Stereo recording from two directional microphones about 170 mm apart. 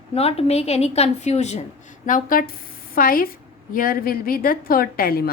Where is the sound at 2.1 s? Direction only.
55° left (ahead or behind).